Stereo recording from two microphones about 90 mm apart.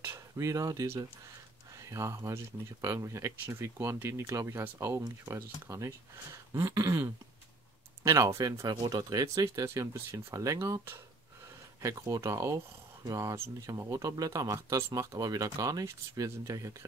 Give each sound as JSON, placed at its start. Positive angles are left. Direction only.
{"t": 0.0, "sound": "speech", "side_deg": -35}
{"t": 11.8, "sound": "speech", "side_deg": -35}